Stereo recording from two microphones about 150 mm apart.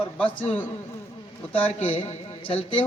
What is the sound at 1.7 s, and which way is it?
A man's voice, 45° left (ahead or behind).